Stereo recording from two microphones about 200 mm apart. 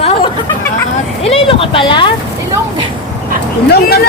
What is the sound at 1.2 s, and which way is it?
Speech, 30° left (ahead or behind).